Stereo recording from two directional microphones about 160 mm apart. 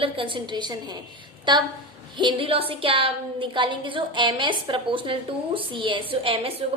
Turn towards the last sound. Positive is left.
turn(degrees=-35)  # may be behind; listen again after turning